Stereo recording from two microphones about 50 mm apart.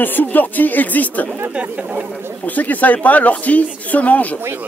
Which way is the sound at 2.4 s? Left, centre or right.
Left.